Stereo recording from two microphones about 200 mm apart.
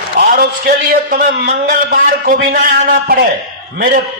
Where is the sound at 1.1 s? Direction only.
45° right (ahead or behind).